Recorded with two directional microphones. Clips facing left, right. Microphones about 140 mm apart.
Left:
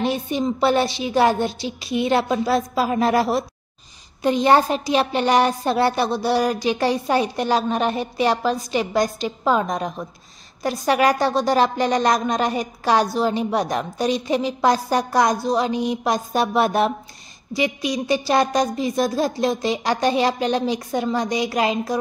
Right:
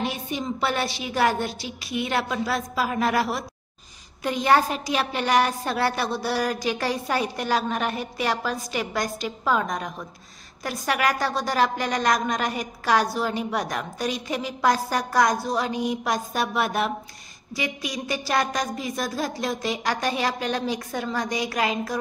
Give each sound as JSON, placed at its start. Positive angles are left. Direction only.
{"t": 0.0, "sound": "a woman's voice", "side_deg": 30}